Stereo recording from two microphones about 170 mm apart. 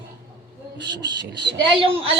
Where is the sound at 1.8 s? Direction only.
30° right (ahead or behind).